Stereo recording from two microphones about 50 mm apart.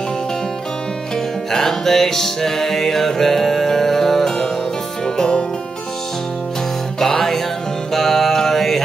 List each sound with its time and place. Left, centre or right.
1.1 s music: centre
7.0 s music: centre